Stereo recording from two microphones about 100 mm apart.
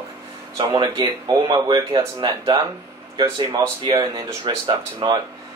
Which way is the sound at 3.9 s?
40° right (ahead or behind).